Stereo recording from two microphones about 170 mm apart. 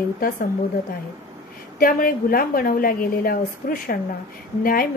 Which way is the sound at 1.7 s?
55° left (ahead or behind).